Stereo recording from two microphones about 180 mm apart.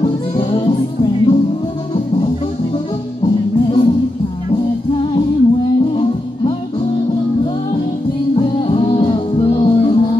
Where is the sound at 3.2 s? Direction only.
30° left (ahead or behind).